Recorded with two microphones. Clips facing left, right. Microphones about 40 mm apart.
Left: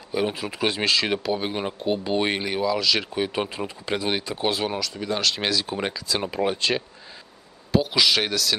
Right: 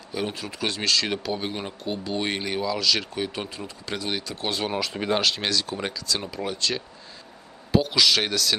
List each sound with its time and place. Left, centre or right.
0.1 s speech: centre
3.3 s speech: left
4.9 s speech: right
5.4 s speech: centre; by 6.8 s left
7.9 s speech: centre